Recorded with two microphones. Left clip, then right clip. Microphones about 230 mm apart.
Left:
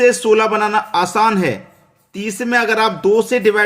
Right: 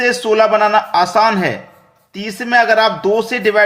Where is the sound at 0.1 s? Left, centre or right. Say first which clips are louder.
Right 1 dB; left.